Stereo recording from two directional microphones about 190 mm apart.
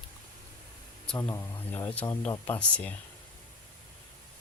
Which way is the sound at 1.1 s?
10° left (ahead or behind).